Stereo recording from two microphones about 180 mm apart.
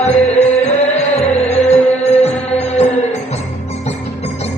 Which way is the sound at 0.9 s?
35° left (ahead or behind).